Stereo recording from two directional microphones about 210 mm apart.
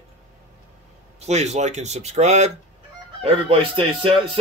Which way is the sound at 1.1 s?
30° right (ahead or behind).